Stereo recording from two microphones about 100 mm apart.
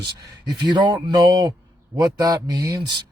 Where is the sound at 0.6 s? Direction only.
50° right (ahead or behind).